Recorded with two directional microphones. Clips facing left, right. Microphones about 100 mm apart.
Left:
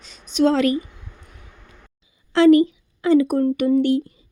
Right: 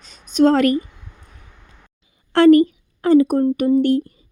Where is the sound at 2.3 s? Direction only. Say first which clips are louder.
Right 2 dB; 50° right (ahead or behind).